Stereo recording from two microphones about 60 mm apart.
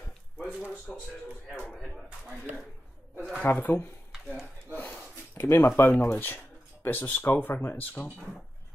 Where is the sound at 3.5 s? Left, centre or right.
Left.